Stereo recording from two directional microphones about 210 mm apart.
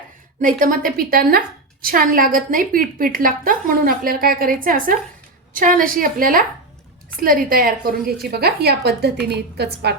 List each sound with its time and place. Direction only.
0.4 s a woman's voice: 40° right (ahead or behind)